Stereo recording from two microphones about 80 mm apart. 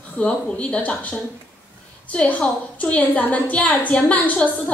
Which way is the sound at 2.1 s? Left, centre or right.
Centre.